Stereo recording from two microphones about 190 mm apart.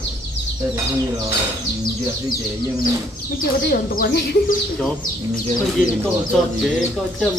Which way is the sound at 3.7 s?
50° left (ahead or behind).